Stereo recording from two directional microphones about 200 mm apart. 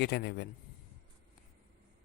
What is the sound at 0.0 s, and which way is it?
Speech, 55° left (ahead or behind).